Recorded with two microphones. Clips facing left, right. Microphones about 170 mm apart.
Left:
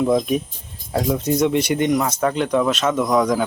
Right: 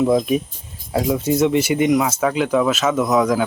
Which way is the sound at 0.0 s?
Centre (ahead or behind).